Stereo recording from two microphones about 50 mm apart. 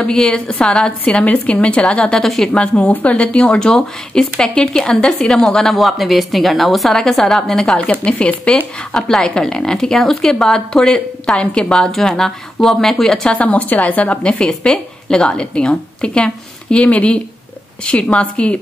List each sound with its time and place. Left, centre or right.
0.0 s speech: centre
1.2 s speech: left
2.2 s speech: centre
2.5 s speech: left
5.8 s speech: centre; by 8.6 s left
8.9 s speech: centre
11.7 s speech: centre
13.3 s speech: left
14.0 s speech: centre
16.7 s speech: left